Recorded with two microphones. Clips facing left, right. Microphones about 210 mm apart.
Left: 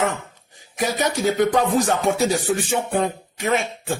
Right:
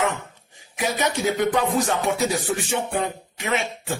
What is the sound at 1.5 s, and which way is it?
Music, 45° left (ahead or behind).